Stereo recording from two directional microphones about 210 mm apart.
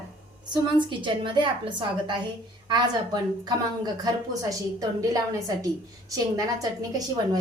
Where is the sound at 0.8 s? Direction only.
25° right (ahead or behind).